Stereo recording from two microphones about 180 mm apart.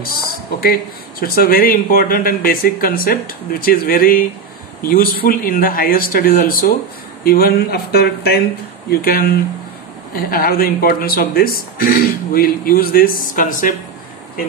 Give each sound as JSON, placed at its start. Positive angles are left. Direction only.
{"t": 0.0, "sound": "speech", "side_deg": 55}